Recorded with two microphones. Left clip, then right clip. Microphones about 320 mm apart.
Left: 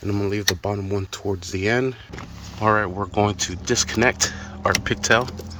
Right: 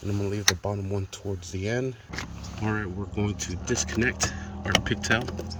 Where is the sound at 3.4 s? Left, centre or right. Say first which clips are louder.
Left 7 dB; centre.